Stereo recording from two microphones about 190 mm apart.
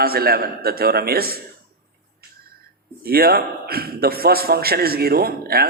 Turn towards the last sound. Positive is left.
turn(degrees=-55)  # may be behind; listen again after turning